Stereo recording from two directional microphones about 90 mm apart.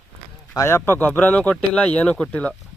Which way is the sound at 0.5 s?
30° left (ahead or behind).